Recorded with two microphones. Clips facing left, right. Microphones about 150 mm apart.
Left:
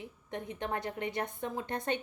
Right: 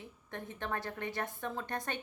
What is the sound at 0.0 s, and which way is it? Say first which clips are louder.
A woman's voice: left 4 dB; 15° left (ahead or behind).